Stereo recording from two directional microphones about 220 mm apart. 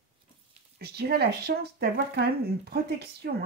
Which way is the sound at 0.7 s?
45° right (ahead or behind).